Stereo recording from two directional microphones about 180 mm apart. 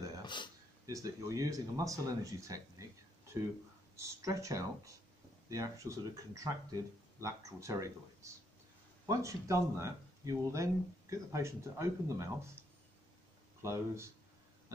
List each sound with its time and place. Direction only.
0.2 s a sound: 25° left (ahead or behind)
0.8 s speech: 20° right (ahead or behind)
3.9 s speech: 15° right (ahead or behind)
13.6 s speech: 15° right (ahead or behind)